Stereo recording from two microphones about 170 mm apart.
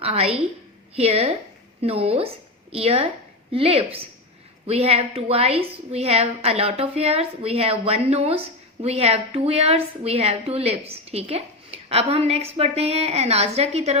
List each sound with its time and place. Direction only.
0.0 s a woman's voice: 35° right (ahead or behind)